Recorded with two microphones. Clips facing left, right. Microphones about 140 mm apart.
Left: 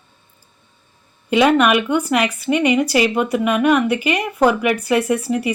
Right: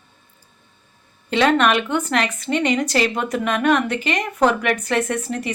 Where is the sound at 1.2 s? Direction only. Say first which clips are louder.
Left 3 dB; 10° left (ahead or behind).